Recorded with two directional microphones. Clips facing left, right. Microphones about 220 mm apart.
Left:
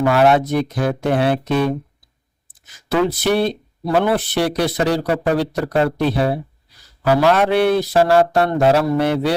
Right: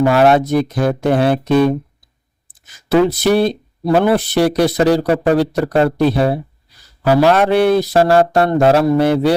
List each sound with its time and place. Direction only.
0.0 s speech: 40° right (ahead or behind)
2.9 s speech: 40° right (ahead or behind)